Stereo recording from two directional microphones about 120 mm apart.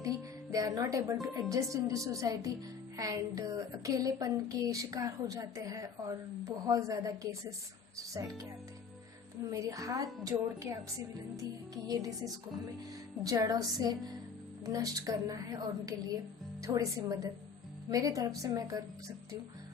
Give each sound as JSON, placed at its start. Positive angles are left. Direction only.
{"t": 0.5, "sound": "a woman's voice", "side_deg": -30}
{"t": 9.5, "sound": "a woman's voice", "side_deg": -30}